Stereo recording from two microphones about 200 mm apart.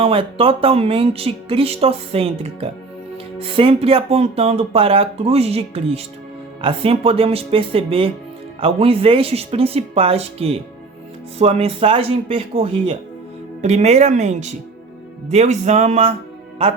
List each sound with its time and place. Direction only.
0.0 s speech: 30° right (ahead or behind)